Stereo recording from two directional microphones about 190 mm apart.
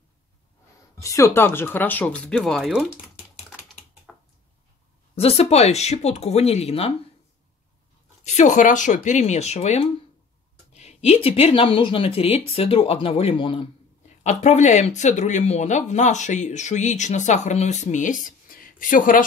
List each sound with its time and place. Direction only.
1.0 s speech: 15° left (ahead or behind); by 2.9 s centre (ahead or behind)
5.1 s speech: 30° left (ahead or behind)
8.4 s speech: 40° left (ahead or behind)